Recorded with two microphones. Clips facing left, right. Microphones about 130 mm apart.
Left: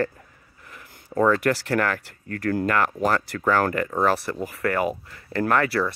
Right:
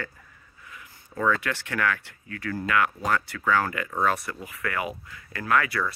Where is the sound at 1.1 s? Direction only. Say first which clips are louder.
Left 6 dB; 35° left (ahead or behind).